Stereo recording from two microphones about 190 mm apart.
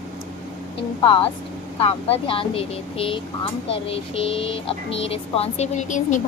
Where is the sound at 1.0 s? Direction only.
25° left (ahead or behind).